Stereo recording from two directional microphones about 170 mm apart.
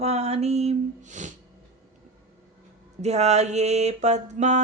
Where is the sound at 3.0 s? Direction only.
40° right (ahead or behind).